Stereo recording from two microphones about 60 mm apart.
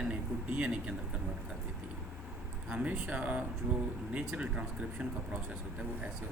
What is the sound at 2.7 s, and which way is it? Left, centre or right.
Speech, right.